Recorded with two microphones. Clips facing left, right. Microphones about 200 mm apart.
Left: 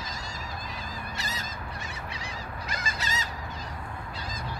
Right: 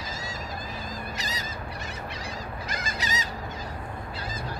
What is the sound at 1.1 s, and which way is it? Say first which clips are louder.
Goose: right 2 dB; 20° right (ahead or behind).